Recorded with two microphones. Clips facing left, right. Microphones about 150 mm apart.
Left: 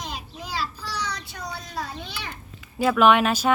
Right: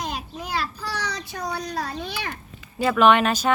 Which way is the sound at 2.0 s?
55° right (ahead or behind).